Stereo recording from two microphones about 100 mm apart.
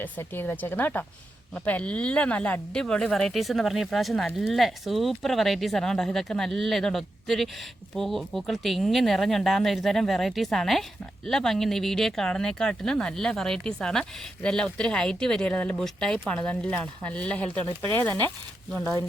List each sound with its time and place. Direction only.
0.0 s speech: 20° left (ahead or behind)